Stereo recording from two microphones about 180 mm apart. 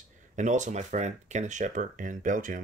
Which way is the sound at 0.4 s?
40° right (ahead or behind).